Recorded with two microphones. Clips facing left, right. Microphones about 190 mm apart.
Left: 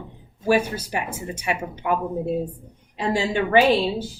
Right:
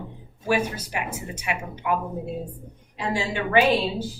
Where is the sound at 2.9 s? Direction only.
30° left (ahead or behind).